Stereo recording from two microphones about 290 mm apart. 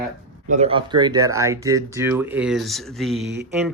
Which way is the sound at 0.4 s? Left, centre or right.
Right.